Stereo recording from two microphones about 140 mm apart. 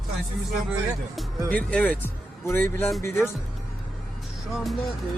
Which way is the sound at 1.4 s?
10° left (ahead or behind).